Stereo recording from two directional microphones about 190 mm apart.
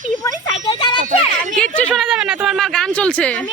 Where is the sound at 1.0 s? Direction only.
40° right (ahead or behind).